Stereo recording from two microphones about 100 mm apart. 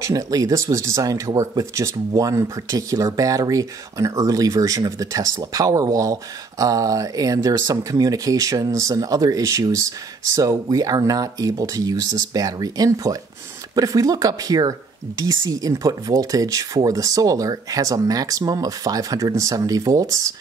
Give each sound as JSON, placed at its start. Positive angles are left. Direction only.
{"t": 0.0, "sound": "speech", "side_deg": -35}